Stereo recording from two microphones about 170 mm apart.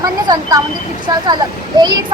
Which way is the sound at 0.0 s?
20° right (ahead or behind).